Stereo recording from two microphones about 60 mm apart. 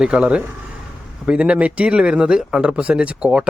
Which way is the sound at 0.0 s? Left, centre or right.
Centre.